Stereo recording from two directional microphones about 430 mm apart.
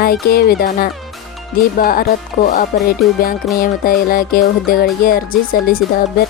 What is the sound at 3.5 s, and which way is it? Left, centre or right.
Speech, centre.